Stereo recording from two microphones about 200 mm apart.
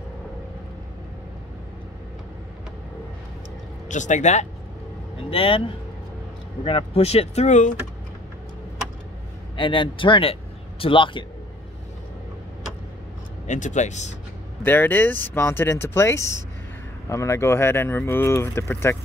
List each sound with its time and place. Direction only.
3.9 s speech: 40° left (ahead or behind)
6.6 s speech: 25° left (ahead or behind)
9.6 s speech: 25° left (ahead or behind)
13.5 s speech: 35° left (ahead or behind)
14.6 s speech: 10° left (ahead or behind)